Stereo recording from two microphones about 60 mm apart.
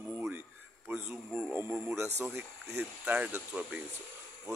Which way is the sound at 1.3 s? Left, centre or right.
Right.